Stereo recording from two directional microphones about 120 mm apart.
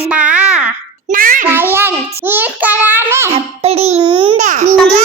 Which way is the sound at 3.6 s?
60° right (ahead or behind).